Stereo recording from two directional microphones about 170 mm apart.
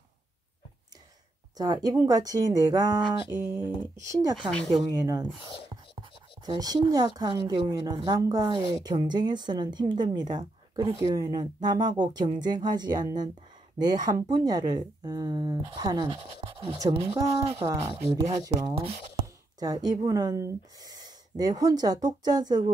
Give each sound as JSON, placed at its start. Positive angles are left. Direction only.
{"t": 1.6, "sound": "a woman's voice", "side_deg": -20}
{"t": 4.4, "sound": "speech", "side_deg": 5}
{"t": 4.9, "sound": "a woman's voice", "side_deg": -20}
{"t": 6.4, "sound": "a woman's voice", "side_deg": -25}